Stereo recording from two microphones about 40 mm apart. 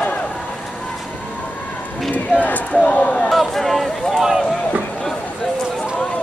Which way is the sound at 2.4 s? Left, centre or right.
Left.